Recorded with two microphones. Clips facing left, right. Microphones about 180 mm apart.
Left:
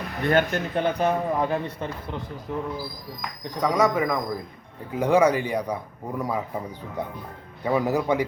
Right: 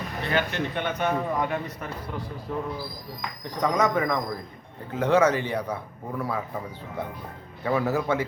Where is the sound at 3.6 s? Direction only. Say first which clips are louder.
Left 2 dB; 5° left (ahead or behind).